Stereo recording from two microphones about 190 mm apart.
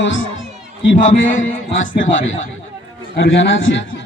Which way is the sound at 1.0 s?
40° left (ahead or behind).